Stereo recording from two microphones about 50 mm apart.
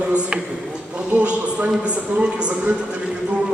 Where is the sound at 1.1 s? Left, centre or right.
Right.